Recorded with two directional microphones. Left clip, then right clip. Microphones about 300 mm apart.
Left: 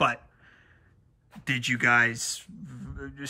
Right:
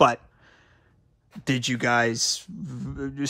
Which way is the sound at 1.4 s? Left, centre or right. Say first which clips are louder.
Even; centre.